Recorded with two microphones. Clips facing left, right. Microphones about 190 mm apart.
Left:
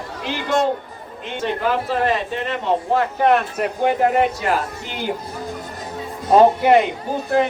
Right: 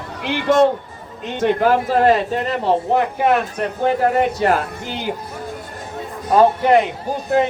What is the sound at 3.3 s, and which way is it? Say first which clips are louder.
Speech: even; 5° left (ahead or behind).